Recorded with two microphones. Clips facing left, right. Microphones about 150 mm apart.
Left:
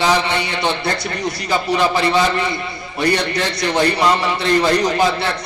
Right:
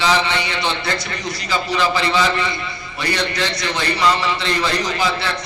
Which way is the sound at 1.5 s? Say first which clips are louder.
Left 2 dB; 50° left (ahead or behind).